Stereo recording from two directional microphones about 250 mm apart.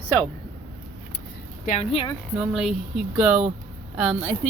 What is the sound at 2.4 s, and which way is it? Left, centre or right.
Speech, centre.